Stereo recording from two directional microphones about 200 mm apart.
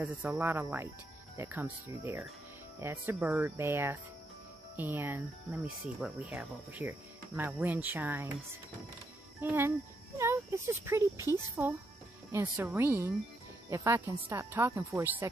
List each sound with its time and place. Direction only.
0.0 s speech: 10° right (ahead or behind)
9.4 s speech: 10° right (ahead or behind)